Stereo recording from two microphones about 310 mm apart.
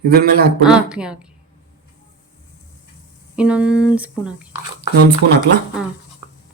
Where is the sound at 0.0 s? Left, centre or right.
Right.